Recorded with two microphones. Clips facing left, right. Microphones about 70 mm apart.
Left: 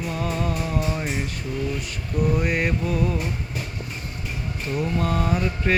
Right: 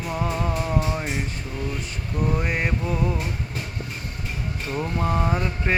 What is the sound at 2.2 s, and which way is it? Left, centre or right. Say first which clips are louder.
Mantra: left 2 dB; right.